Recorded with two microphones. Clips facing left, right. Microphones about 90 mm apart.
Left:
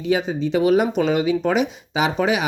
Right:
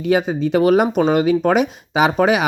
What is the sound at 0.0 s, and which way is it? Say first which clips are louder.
Speech: right 4 dB; 60° right (ahead or behind).